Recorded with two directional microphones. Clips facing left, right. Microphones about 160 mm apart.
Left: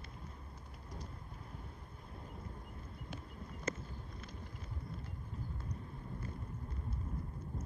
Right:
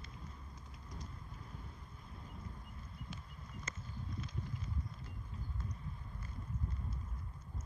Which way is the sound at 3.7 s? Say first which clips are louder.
Left 12 dB; 60° left (ahead or behind).